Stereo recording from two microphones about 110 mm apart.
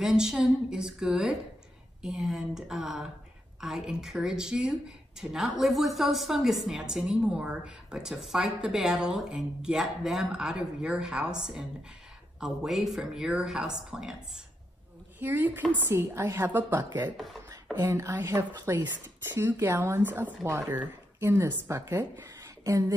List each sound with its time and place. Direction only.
0.0 s speech: 5° right (ahead or behind)
15.1 s a woman's voice: 15° right (ahead or behind)